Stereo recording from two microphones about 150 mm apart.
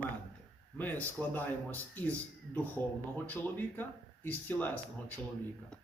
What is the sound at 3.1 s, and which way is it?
Speech, 10° left (ahead or behind).